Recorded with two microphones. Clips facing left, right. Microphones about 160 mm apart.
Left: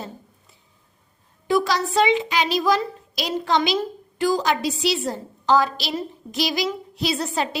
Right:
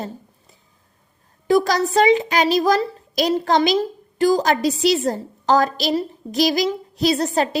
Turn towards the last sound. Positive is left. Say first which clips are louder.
# right 6 dB
turn(degrees=-40)  # may be behind; listen again after turning